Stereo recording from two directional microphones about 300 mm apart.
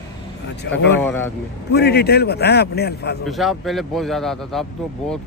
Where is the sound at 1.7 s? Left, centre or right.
Left.